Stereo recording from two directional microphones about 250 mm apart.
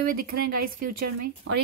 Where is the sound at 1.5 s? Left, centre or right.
Right.